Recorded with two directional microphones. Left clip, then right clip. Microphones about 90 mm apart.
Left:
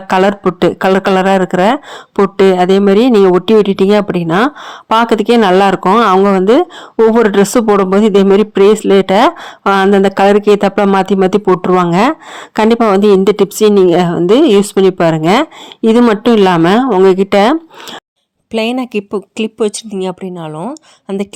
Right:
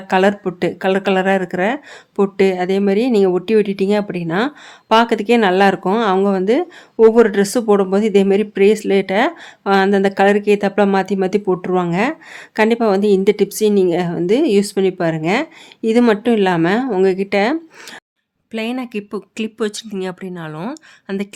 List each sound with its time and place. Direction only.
0.1 s speech: 40° left (ahead or behind)
18.5 s speech: 60° left (ahead or behind)
19.1 s speech: 35° left (ahead or behind)
20.5 s speech: 5° left (ahead or behind)
21.1 s speech: 40° left (ahead or behind)